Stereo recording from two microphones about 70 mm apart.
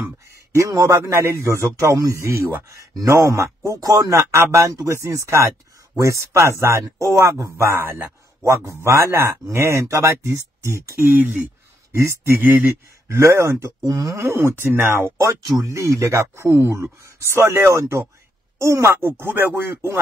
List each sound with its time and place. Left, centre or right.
0.5 s a man's voice: right
11.1 s speech: right
13.1 s speech: right
14.1 s speech: right
15.4 s a man's voice: right